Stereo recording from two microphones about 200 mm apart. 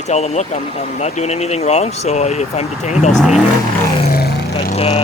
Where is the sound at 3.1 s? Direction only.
Centre (ahead or behind).